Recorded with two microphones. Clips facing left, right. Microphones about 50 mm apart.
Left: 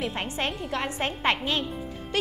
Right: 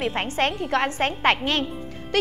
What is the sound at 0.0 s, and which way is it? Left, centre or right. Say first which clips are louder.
Speech: right 5 dB; right.